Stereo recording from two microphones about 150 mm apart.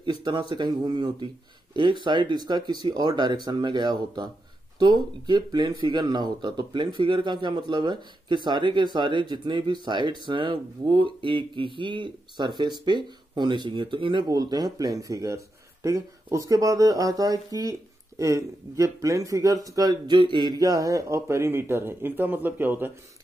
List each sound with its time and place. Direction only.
0.0 s speech: 30° right (ahead or behind); by 22.9 s 15° right (ahead or behind)